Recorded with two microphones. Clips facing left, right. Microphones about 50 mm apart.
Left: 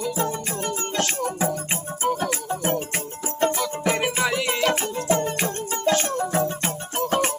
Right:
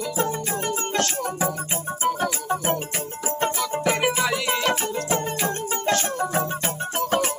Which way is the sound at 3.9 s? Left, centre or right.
Centre.